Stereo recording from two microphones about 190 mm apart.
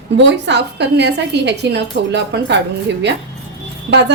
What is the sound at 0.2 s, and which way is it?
A woman's voice, 70° right (ahead or behind).